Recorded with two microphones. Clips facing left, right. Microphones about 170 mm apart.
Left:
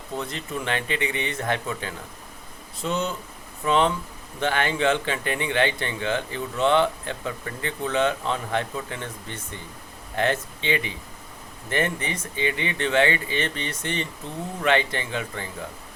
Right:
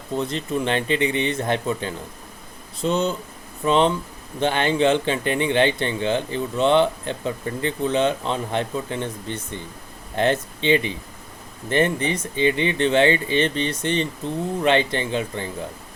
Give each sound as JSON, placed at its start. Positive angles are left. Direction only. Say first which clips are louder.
{"t": 0.2, "sound": "speech", "louder": "right 8 dB", "side_deg": -25}